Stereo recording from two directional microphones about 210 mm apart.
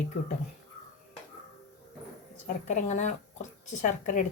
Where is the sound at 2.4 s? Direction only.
35° left (ahead or behind).